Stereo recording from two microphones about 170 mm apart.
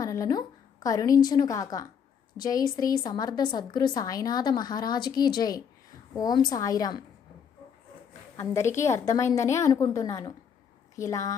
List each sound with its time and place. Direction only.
0.0 s a woman's voice: 20° left (ahead or behind)
8.4 s a woman's voice: 15° left (ahead or behind)